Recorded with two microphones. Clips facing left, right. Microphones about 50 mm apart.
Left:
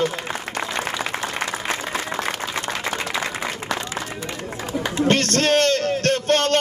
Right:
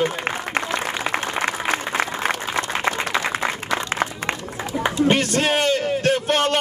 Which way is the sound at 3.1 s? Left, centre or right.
Right.